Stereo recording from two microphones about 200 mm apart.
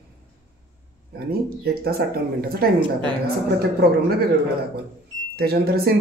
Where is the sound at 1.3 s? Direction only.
50° right (ahead or behind).